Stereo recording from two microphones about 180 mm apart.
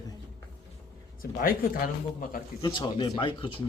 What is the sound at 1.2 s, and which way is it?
Speech, 55° left (ahead or behind).